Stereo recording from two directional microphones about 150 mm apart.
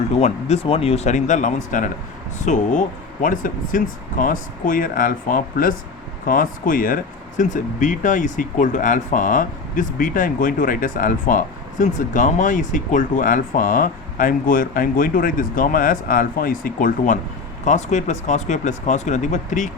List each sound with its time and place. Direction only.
0.1 s speech: 45° left (ahead or behind)
17.7 s speech: 50° left (ahead or behind)